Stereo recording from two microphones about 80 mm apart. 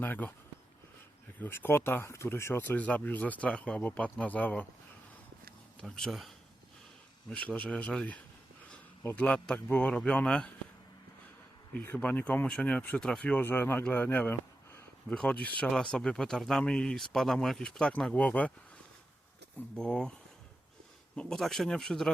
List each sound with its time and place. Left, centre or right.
0.0 s speech: left
1.4 s speech: left
5.8 s speech: centre
7.3 s speech: centre
11.7 s speech: left
15.1 s speech: centre
19.7 s speech: centre
21.2 s speech: centre